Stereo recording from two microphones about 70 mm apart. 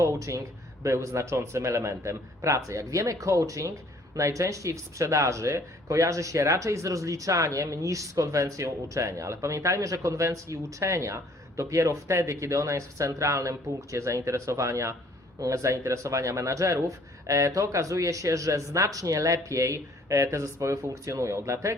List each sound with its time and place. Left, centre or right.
0.0 s speech: right